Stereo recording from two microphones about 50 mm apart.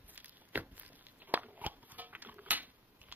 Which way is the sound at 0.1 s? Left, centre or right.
Right.